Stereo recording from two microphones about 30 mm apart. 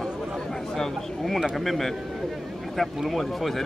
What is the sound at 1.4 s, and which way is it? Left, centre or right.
Speech, centre.